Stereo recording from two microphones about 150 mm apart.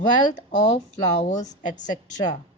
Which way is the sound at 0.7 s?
50° left (ahead or behind).